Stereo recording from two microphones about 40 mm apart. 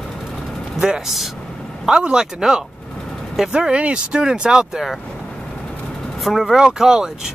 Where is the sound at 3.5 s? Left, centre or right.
Right.